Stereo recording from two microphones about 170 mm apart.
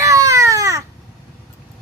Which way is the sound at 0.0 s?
20° right (ahead or behind).